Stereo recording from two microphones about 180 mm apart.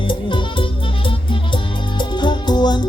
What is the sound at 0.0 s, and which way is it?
Music, 25° left (ahead or behind).